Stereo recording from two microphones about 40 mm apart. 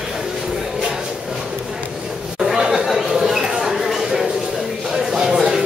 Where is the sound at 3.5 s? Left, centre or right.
Centre.